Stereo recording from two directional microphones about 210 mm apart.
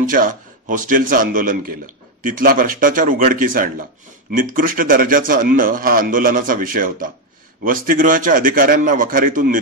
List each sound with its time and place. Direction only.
0.0 s a man's voice: 40° right (ahead or behind)